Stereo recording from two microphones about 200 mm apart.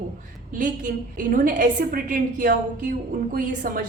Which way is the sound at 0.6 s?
40° right (ahead or behind).